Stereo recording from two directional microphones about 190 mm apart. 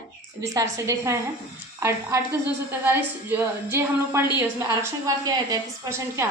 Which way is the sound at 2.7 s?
10° right (ahead or behind).